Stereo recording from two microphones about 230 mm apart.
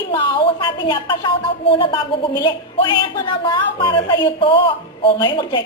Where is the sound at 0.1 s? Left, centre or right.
Centre.